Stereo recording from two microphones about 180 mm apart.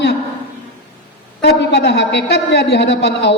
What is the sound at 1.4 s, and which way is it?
A man's voice, 70° left (ahead or behind).